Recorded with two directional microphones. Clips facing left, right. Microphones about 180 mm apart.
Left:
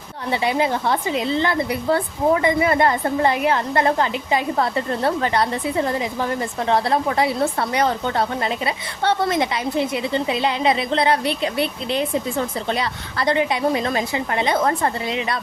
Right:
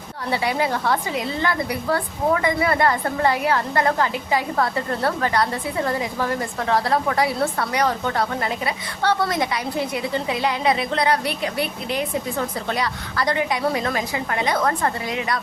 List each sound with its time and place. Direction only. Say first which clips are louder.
0.3 s a woman's voice: left 2 dB; 20° left (ahead or behind)